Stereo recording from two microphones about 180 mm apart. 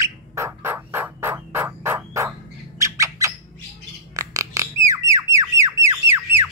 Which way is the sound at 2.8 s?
15° right (ahead or behind).